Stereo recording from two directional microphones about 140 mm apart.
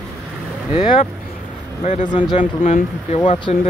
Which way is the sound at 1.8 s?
55° left (ahead or behind).